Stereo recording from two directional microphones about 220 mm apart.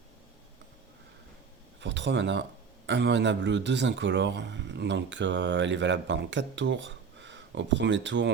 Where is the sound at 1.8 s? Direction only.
55° right (ahead or behind).